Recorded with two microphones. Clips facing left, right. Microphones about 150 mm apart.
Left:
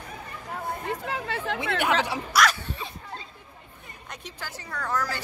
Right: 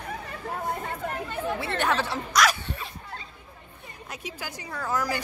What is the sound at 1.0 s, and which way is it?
Speech, 90° left.